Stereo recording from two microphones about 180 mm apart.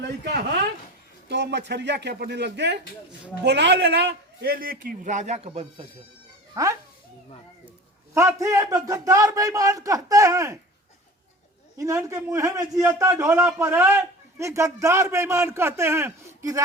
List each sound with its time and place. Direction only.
0.0 s a man's voice: 65° right (ahead or behind); by 5.8 s 35° right (ahead or behind)
6.5 s speech: 15° right (ahead or behind)
8.1 s a man's voice: 15° right (ahead or behind)
11.8 s a man's voice: 15° right (ahead or behind)